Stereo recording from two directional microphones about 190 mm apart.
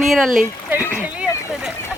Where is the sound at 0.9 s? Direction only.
5° right (ahead or behind).